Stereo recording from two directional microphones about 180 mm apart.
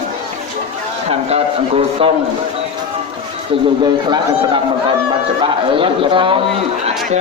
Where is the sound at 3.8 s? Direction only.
25° right (ahead or behind).